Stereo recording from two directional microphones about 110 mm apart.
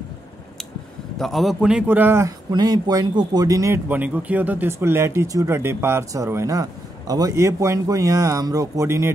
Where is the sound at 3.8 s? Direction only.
15° right (ahead or behind).